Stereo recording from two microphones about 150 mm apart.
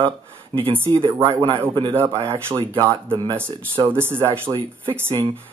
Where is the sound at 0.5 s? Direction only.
35° right (ahead or behind).